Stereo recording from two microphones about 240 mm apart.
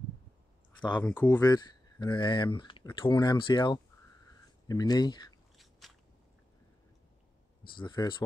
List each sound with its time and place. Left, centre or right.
1.0 s speech: centre
5.6 s biting: centre
7.7 s speech: centre